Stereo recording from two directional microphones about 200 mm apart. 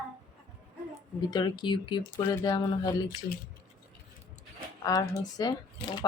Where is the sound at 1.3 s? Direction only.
20° left (ahead or behind).